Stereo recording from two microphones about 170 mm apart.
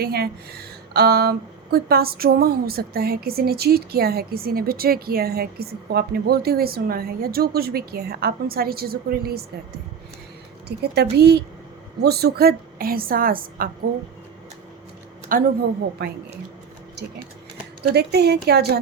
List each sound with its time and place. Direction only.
0.0 s speech: 65° right (ahead or behind)
10.7 s a woman's voice: 75° right (ahead or behind); by 13.7 s 60° right (ahead or behind)
15.3 s speech: 55° right (ahead or behind)
16.0 s a woman's voice: 75° right (ahead or behind)